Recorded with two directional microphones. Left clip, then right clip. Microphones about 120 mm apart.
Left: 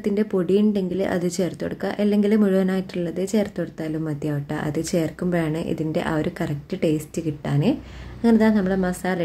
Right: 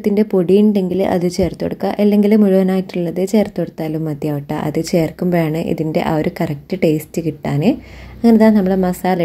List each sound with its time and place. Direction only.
0.0 s a woman's voice: 30° right (ahead or behind)